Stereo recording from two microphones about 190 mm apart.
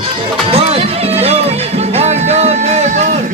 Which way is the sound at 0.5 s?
30° right (ahead or behind).